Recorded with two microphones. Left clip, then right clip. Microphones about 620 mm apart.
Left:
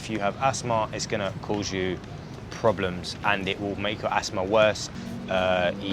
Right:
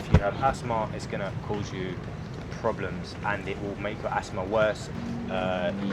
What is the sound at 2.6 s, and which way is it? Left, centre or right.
Speech, left.